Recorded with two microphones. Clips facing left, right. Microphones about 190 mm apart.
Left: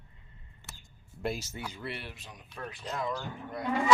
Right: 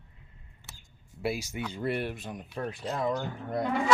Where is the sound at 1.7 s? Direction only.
40° right (ahead or behind).